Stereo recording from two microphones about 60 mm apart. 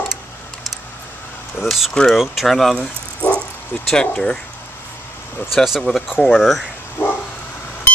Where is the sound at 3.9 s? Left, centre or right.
Centre.